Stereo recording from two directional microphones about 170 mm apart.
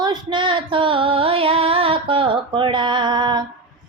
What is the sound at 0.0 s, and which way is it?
Female singing, 25° right (ahead or behind).